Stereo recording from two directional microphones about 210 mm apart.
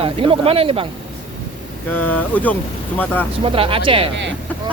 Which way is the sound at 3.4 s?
25° right (ahead or behind).